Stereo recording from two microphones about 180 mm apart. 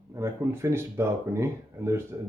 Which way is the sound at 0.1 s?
15° right (ahead or behind).